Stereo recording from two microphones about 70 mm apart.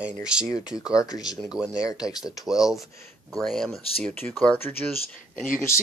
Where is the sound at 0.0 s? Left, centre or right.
Centre.